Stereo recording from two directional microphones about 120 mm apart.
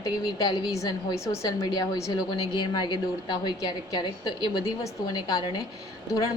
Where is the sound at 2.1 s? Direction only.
40° left (ahead or behind).